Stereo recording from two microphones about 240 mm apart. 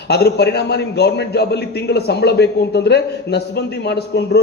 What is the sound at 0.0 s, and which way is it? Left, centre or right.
A man's voice, left.